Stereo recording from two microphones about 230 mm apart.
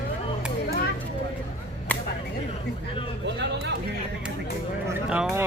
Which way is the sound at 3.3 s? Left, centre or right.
Right.